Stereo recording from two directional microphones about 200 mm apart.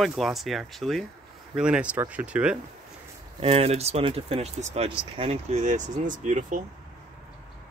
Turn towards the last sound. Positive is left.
turn(degrees=-40)  # may be behind; listen again after turning